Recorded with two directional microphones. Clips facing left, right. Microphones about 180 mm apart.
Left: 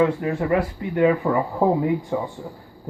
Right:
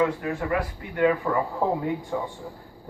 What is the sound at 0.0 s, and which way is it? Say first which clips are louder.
Speech: left 4 dB; 25° left (ahead or behind).